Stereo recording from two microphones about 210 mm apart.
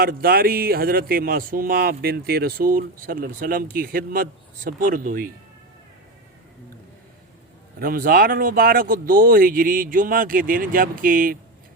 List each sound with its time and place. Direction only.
0.0 s speech: 45° right (ahead or behind)
7.8 s speech: 45° right (ahead or behind)